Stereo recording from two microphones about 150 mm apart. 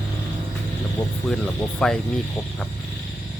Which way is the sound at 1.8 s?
5° left (ahead or behind).